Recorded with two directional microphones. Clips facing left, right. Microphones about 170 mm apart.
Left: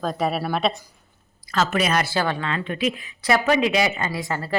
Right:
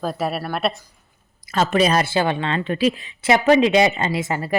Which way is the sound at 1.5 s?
30° right (ahead or behind).